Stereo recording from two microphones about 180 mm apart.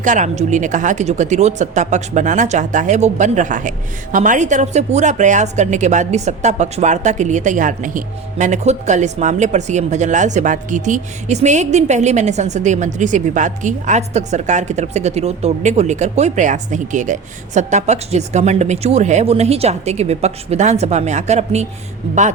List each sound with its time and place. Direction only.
0.0 s speech: 45° right (ahead or behind)